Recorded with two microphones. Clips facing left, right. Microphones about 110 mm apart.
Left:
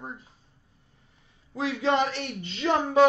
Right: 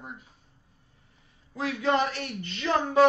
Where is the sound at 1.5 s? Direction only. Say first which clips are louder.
Left 1 dB; 25° left (ahead or behind).